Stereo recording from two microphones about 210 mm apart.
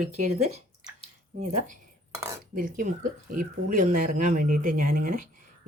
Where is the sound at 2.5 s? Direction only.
40° right (ahead or behind).